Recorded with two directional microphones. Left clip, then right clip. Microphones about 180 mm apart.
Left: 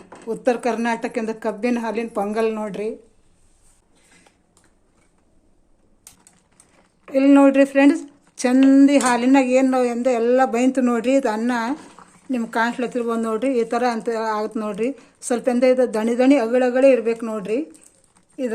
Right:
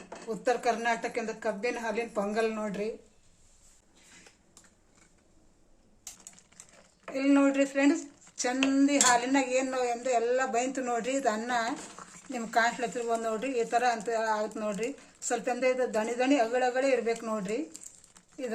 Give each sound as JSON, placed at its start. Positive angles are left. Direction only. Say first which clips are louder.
{"t": 0.3, "sound": "speech", "louder": "left 7 dB", "side_deg": 55}
{"t": 7.1, "sound": "speech", "louder": "left 12 dB", "side_deg": 55}
{"t": 12.0, "sound": "a sound", "louder": "left 2 dB", "side_deg": -20}
{"t": 12.3, "sound": "speech", "louder": "left 6 dB", "side_deg": 50}